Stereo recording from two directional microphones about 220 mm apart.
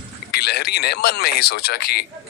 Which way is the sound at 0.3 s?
45° left (ahead or behind).